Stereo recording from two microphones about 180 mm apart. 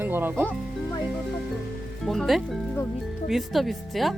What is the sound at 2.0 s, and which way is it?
Speech, centre (ahead or behind).